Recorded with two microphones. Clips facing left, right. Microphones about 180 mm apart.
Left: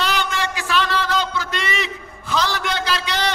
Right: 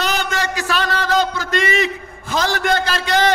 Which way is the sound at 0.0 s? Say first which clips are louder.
Right 2 dB; 45° right (ahead or behind).